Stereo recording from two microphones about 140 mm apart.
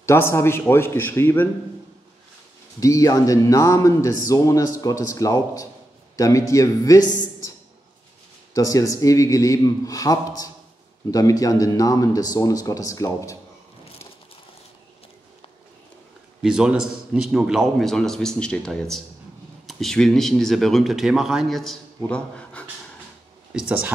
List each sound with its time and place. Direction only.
0.0 s a man's voice: 20° left (ahead or behind)
2.8 s speech: 25° left (ahead or behind)
8.5 s speech: 25° left (ahead or behind)
16.4 s speech: 5° right (ahead or behind)
23.5 s speech: 10° right (ahead or behind)